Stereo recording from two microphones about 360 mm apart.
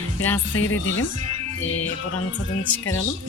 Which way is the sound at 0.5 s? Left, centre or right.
Left.